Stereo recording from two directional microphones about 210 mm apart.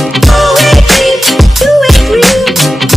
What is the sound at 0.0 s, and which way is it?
Music, centre (ahead or behind).